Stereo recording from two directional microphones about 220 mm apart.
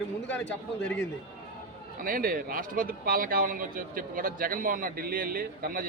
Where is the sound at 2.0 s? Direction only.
40° right (ahead or behind).